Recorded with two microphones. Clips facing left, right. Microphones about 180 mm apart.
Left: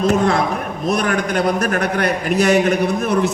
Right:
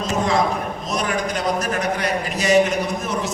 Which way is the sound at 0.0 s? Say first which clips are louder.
Left 4 dB; 60° left (ahead or behind).